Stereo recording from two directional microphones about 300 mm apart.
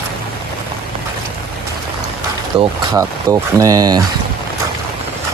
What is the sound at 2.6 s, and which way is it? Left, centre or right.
Speech, centre.